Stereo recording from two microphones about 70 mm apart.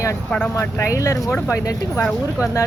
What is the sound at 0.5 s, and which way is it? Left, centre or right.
Speech, left.